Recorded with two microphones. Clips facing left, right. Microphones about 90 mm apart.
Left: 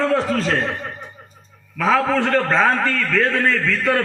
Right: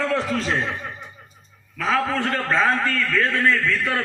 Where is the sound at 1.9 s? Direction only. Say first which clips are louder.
Left 5 dB; 90° left.